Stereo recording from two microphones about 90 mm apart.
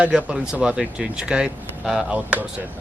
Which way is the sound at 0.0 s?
15° right (ahead or behind).